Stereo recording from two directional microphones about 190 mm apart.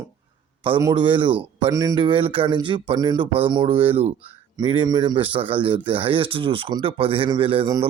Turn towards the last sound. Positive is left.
turn(degrees=-25)  # may be behind; listen again after turning